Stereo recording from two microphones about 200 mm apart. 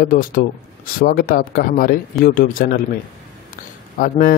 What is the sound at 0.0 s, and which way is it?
Speech, 45° left (ahead or behind).